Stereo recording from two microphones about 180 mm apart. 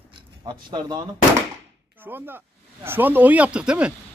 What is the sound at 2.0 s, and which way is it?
Speech, 10° right (ahead or behind).